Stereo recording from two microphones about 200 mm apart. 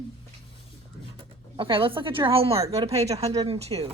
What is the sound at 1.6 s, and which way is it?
A woman's voice, 25° right (ahead or behind).